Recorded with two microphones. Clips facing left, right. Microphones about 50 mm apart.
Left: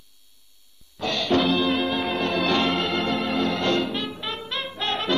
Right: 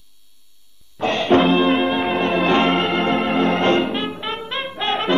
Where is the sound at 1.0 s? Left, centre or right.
Right.